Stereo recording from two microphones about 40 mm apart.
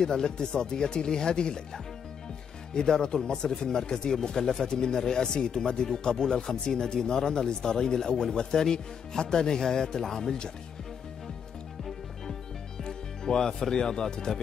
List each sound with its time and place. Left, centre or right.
0.0 s speech: centre
12.8 s speech: centre